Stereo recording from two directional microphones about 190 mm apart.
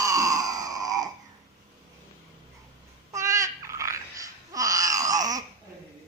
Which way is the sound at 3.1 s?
15° right (ahead or behind).